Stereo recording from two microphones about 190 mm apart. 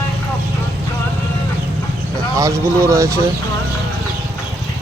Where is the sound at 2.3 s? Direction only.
15° right (ahead or behind).